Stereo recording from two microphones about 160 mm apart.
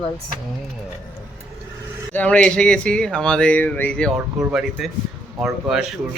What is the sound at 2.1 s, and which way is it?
A man's voice, 5° left (ahead or behind).